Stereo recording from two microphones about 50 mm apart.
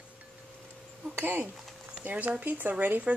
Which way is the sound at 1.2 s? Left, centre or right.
Right.